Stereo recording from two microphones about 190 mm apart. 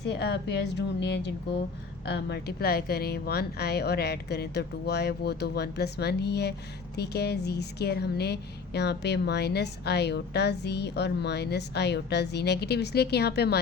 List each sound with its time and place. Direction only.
0.0 s speech: 60° left (ahead or behind)